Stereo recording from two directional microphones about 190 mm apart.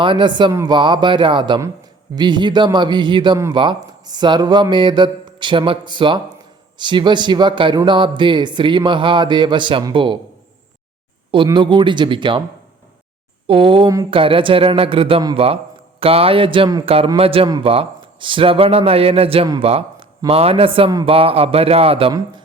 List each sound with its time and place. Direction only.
0.0 s a man's voice: 25° right (ahead or behind)
11.3 s a man's voice: 25° right (ahead or behind)
13.5 s a man's voice: 25° right (ahead or behind)